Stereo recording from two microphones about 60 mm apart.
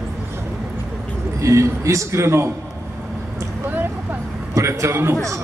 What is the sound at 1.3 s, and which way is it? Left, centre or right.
A man's voice, right.